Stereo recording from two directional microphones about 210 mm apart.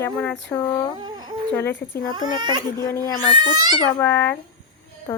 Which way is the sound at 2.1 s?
20° right (ahead or behind).